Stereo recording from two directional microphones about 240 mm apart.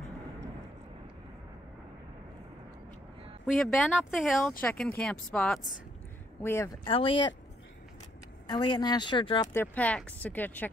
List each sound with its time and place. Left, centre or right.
3.4 s speech: centre
6.9 s speech: left
8.5 s speech: centre
9.5 s speech: centre